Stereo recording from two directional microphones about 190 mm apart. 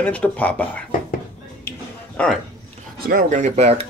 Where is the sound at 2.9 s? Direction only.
50° right (ahead or behind); by 3.8 s 35° right (ahead or behind).